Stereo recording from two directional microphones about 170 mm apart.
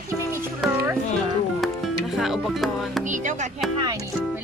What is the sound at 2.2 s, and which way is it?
Music, centre (ahead or behind).